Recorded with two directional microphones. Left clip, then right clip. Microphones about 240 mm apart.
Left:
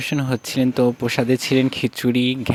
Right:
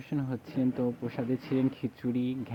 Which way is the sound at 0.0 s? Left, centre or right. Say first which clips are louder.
Left 13 dB; left.